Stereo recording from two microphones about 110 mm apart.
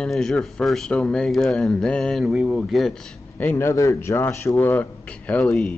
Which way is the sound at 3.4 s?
20° left (ahead or behind).